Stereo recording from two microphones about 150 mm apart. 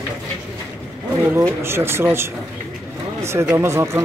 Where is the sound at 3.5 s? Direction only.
20° right (ahead or behind).